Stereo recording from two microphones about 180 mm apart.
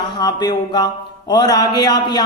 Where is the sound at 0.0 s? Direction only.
25° left (ahead or behind).